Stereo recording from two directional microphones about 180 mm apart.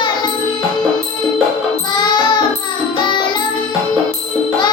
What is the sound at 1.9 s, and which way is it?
Music, 25° left (ahead or behind).